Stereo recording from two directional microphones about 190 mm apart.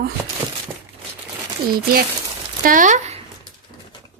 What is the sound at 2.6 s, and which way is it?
Speech, 45° right (ahead or behind).